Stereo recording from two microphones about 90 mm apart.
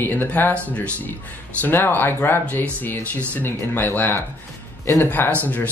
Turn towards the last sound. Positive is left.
turn(degrees=20)  # may be behind; listen again after turning